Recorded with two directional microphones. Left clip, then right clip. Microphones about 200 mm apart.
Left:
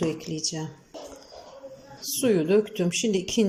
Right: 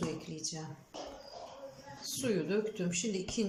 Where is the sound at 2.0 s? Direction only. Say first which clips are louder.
Left 11 dB; 35° left (ahead or behind).